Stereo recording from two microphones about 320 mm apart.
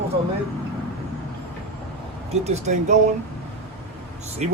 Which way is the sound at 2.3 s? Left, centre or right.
Right.